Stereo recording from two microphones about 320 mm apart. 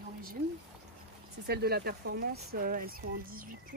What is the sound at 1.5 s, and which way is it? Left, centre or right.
Speech, right.